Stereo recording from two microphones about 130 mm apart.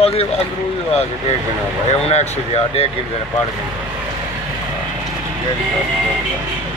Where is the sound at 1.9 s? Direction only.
55° left (ahead or behind).